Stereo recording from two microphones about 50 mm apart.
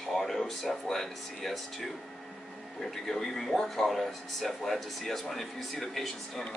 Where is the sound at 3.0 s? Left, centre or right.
Centre.